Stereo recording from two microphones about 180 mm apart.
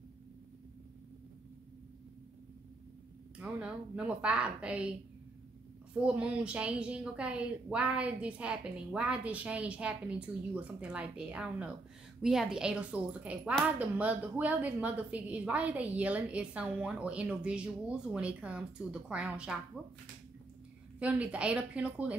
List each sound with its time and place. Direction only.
3.3 s a woman's voice: 5° right (ahead or behind)
5.9 s a woman's voice: 5° right (ahead or behind)
21.0 s a woman's voice: 5° right (ahead or behind)